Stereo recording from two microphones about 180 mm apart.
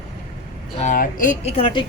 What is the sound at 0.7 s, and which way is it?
Speech, 45° left (ahead or behind).